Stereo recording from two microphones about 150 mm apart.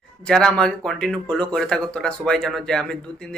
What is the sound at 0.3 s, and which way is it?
Speech, 5° left (ahead or behind).